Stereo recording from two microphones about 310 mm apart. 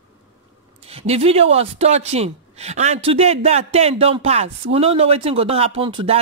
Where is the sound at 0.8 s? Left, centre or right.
Centre.